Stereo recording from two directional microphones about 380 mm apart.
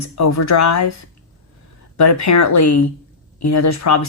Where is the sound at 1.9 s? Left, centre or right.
Left.